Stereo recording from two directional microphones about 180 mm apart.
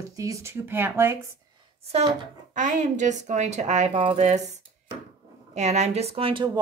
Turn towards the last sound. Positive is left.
turn(degrees=-30)  # may be behind; listen again after turning